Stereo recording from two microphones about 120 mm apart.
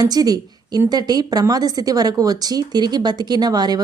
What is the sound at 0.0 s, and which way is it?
A woman's voice, 35° right (ahead or behind).